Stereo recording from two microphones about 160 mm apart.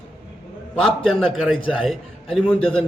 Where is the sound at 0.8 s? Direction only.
Centre (ahead or behind).